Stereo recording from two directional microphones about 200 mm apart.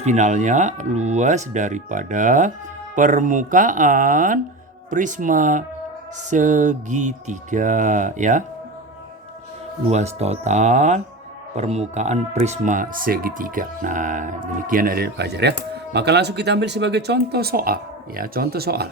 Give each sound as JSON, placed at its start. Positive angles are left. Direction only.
{"t": 0.0, "sound": "speech", "side_deg": -35}
{"t": 9.9, "sound": "speech", "side_deg": -35}